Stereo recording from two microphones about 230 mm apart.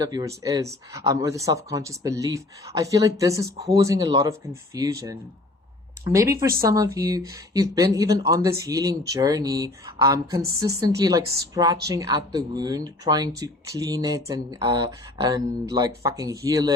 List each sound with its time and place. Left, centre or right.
0.0 s speech: centre